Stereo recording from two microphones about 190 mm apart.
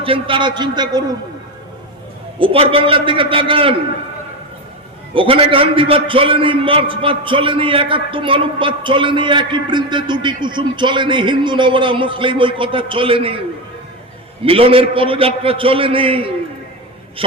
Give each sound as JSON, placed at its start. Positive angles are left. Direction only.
{"t": 0.0, "sound": "a man's voice", "side_deg": -25}
{"t": 2.4, "sound": "a man's voice", "side_deg": -30}
{"t": 5.1, "sound": "a man's voice", "side_deg": -30}
{"t": 14.4, "sound": "a man's voice", "side_deg": -30}